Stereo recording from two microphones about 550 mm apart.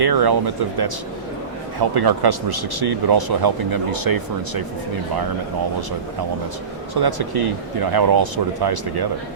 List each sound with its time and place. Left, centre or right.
0.0 s speech: right
6.9 s speech: right